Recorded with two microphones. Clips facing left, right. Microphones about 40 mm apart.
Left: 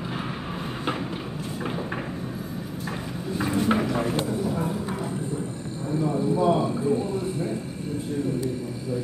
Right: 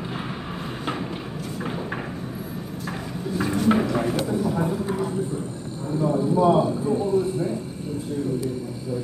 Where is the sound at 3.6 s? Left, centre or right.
Centre.